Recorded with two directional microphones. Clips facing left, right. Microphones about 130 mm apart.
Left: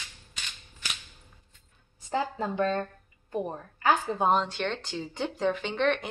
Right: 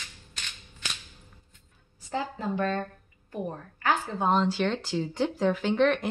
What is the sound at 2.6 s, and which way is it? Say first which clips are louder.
A woman's voice: left 2 dB; 25° left (ahead or behind).